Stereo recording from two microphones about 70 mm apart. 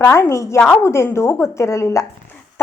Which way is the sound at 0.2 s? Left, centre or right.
Left.